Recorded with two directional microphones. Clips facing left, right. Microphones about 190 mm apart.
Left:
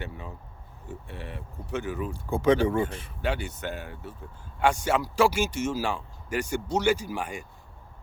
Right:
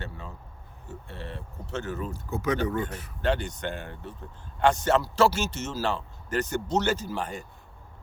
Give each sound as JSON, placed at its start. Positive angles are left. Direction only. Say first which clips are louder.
{"t": 0.0, "sound": "speech", "louder": "left 1 dB", "side_deg": 15}
{"t": 2.3, "sound": "speech", "louder": "left 6 dB", "side_deg": 30}
{"t": 3.2, "sound": "speech", "louder": "right 3 dB", "side_deg": 10}